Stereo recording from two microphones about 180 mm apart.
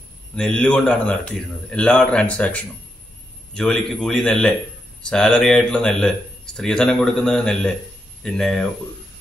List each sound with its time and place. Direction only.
0.4 s a man's voice: 5° left (ahead or behind)